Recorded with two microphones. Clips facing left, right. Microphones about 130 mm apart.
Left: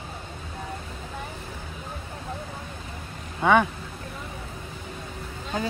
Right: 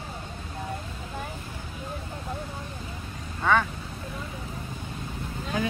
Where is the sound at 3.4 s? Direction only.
15° left (ahead or behind).